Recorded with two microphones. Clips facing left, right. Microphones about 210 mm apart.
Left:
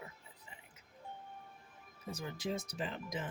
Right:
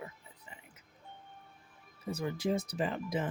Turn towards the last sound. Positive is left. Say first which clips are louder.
# right 7 dB
turn(degrees=-60)  # may be behind; listen again after turning